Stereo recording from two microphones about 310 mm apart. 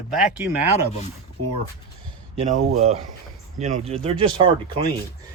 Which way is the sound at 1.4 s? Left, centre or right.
Right.